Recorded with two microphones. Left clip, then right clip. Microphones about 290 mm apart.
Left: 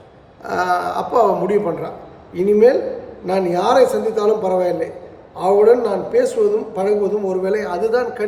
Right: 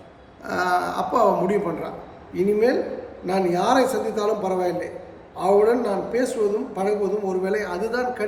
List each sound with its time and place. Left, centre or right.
0.4 s a man's voice: centre